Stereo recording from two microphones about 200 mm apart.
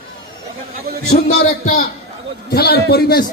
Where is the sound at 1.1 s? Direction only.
50° left (ahead or behind).